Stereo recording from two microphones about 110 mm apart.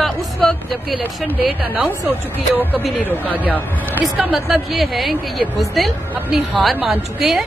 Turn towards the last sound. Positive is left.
turn(degrees=0)  # may be behind; listen again after turning